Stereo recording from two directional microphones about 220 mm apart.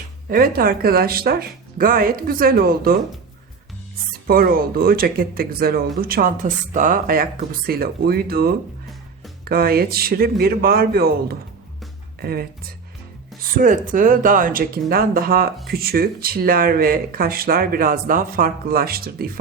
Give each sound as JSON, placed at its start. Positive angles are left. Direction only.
{"t": 0.3, "sound": "a woman's voice", "side_deg": -40}
{"t": 4.3, "sound": "a woman's voice", "side_deg": -40}